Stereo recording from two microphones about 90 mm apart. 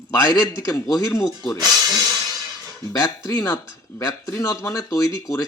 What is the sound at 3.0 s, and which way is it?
Speech, 45° left (ahead or behind).